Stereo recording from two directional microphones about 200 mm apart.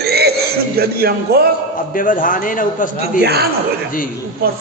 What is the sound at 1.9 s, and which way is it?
Speech, 45° left (ahead or behind).